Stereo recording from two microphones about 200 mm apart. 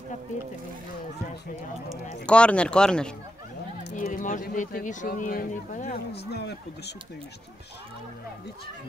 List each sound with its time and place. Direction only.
2.2 s speech: 5° left (ahead or behind)
3.9 s speech: 40° left (ahead or behind)
6.1 s speech: 55° left (ahead or behind)